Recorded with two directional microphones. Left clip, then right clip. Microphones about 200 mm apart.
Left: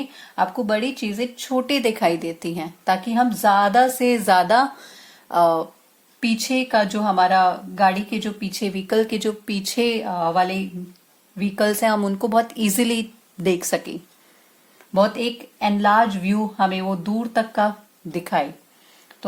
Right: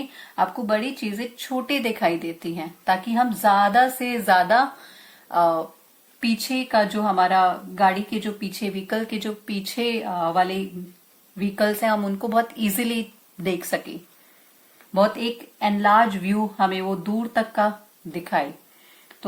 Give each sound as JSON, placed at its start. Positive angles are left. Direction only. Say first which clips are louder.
{"t": 0.3, "sound": "speech", "louder": "left 1 dB", "side_deg": 50}
{"t": 14.9, "sound": "speech", "louder": "left 1 dB", "side_deg": 45}